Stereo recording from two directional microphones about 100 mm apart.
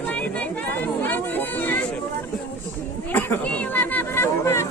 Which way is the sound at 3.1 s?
15° left (ahead or behind).